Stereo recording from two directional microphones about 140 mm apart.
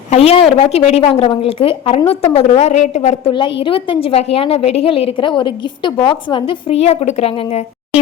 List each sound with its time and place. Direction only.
0.1 s a woman's voice: 45° left (ahead or behind)
1.1 s a woman's voice: 35° left (ahead or behind)
2.3 s a woman's voice: 50° left (ahead or behind)
3.2 s a woman's voice: 35° left (ahead or behind)